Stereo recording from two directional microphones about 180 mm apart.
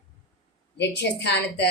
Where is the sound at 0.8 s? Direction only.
65° left (ahead or behind).